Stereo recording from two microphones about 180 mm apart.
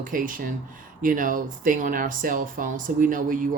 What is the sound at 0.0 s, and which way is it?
Speech, 50° right (ahead or behind).